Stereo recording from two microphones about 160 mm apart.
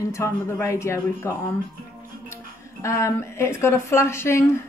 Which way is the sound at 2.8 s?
20° left (ahead or behind).